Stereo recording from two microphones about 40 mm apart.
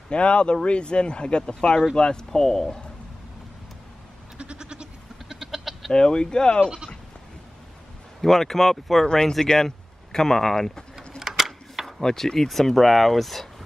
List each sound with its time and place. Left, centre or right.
0.1 s speech: left
4.4 s goat: right
5.3 s goat: centre
5.9 s speech: centre
8.2 s speech: centre
9.0 s speech: centre
11.0 s a sound: centre
12.0 s speech: centre